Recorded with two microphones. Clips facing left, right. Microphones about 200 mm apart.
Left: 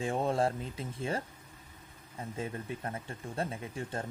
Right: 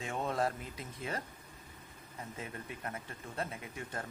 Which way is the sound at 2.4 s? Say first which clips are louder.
Left 6 dB; 30° left (ahead or behind).